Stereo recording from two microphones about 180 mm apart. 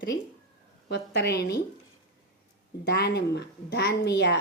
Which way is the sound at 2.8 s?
65° left (ahead or behind).